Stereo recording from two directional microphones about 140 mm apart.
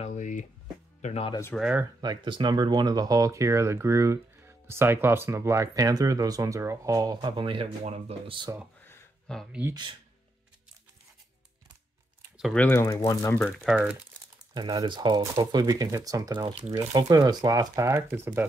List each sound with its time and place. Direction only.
0.0 s a sound: 60° left (ahead or behind)
1.0 s speech: 45° left (ahead or behind)
1.6 s speech: 10° right (ahead or behind)
2.0 s speech: 30° right (ahead or behind)
9.3 s speech: centre (ahead or behind)
12.5 s speech: 15° left (ahead or behind)
13.4 s speech: 5° left (ahead or behind)
14.5 s speech: 30° right (ahead or behind)